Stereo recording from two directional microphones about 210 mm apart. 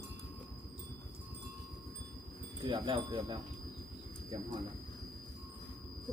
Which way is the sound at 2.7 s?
25° right (ahead or behind).